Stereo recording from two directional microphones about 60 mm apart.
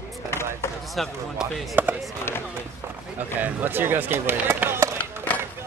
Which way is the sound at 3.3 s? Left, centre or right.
Right.